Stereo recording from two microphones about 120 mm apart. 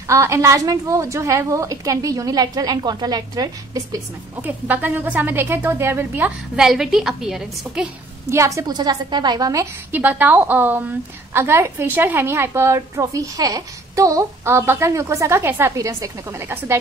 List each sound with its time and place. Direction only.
0.1 s a woman's voice: 25° right (ahead or behind)
4.4 s a woman's voice: 15° right (ahead or behind)
6.5 s a woman's voice: 5° right (ahead or behind)
8.3 s a woman's voice: 25° right (ahead or behind)
9.8 s a woman's voice: 15° right (ahead or behind)